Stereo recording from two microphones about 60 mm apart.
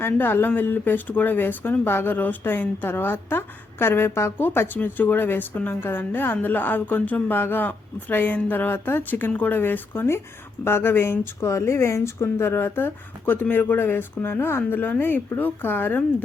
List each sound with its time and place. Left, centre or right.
0.0 s speech: left